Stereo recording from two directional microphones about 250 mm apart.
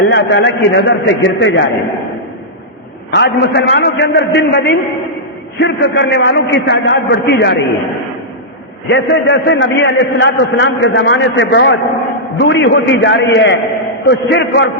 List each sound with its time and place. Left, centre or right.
0.1 s a man's voice: left
3.2 s a man's voice: left
8.9 s a man's voice: left